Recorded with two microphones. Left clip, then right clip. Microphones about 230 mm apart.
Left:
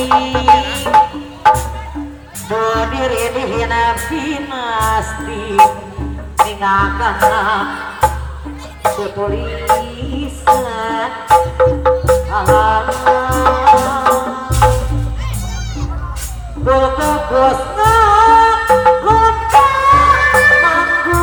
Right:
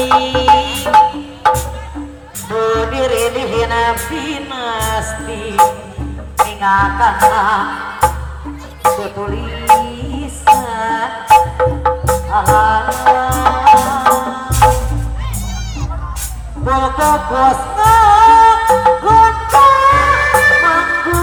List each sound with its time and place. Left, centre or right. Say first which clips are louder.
0.0 s music: right 1 dB; right
2.6 s music: right 1 dB; right
16.6 s music: even; right